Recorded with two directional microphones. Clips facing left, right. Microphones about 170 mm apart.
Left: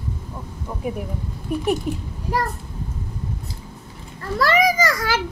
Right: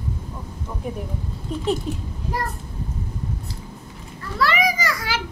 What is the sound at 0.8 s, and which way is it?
A woman's voice, 10° left (ahead or behind).